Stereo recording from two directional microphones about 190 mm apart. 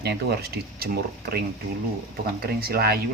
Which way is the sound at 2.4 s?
50° right (ahead or behind).